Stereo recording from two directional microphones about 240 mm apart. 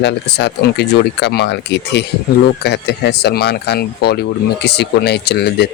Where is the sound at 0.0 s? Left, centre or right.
Left.